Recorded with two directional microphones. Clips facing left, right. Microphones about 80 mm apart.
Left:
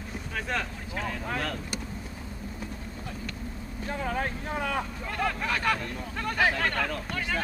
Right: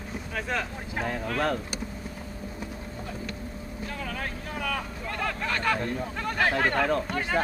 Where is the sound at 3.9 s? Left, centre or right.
Left.